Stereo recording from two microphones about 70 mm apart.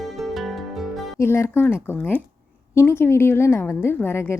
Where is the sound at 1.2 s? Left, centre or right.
Left.